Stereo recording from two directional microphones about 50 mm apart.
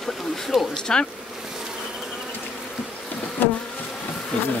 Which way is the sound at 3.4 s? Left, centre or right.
Left.